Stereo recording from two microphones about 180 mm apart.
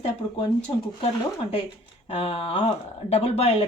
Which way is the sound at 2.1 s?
30° left (ahead or behind).